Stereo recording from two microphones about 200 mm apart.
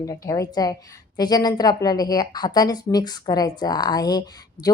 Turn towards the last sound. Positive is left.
turn(degrees=20)  # may be behind; listen again after turning